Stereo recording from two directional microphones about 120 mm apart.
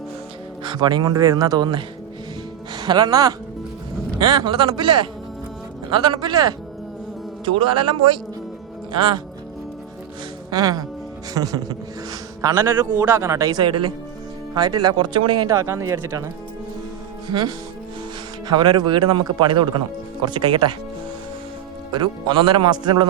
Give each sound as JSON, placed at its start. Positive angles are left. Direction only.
{"t": 0.6, "sound": "speech", "side_deg": -35}
{"t": 10.5, "sound": "speech", "side_deg": -30}
{"t": 15.5, "sound": "speech", "side_deg": -25}
{"t": 17.2, "sound": "speech", "side_deg": -35}
{"t": 21.9, "sound": "speech", "side_deg": -40}